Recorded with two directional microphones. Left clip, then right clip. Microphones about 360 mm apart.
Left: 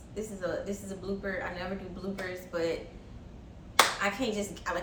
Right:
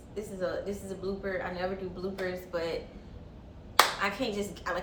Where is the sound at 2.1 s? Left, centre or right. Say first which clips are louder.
Even; centre.